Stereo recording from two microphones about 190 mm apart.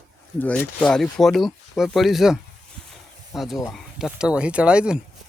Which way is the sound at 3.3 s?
Centre (ahead or behind).